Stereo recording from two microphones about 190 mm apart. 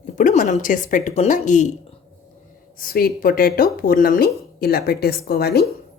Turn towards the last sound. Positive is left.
turn(degrees=55)  # may be behind; listen again after turning